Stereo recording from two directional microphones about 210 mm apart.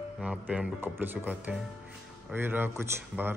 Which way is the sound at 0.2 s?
5° right (ahead or behind).